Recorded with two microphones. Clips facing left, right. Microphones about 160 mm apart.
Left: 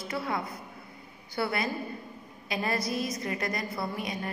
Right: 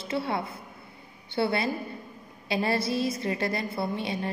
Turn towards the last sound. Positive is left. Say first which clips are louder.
# right 4 dB
turn(degrees=-30)  # may be behind; listen again after turning